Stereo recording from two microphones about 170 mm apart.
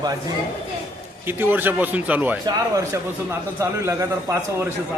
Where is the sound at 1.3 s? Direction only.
15° right (ahead or behind).